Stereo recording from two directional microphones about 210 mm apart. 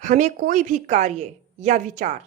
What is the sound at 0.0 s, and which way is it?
A woman's voice, 35° right (ahead or behind).